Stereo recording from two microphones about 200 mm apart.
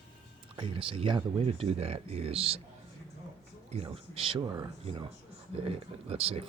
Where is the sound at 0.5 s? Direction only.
25° right (ahead or behind).